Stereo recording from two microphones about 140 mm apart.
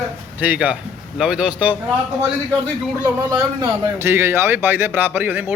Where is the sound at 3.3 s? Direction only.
30° right (ahead or behind).